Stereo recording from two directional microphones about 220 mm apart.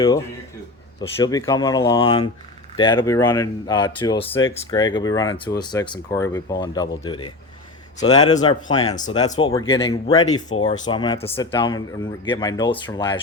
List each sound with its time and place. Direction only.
1.1 s a man's voice: 15° left (ahead or behind)